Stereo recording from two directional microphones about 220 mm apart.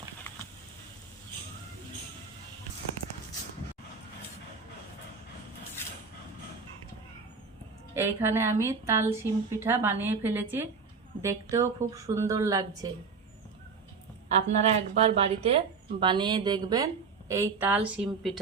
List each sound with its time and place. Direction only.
7.9 s a woman's voice: 10° right (ahead or behind)
14.3 s a woman's voice: 30° right (ahead or behind); by 18.3 s 5° right (ahead or behind)